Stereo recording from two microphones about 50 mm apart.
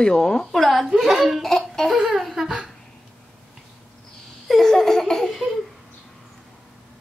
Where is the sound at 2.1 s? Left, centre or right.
Centre.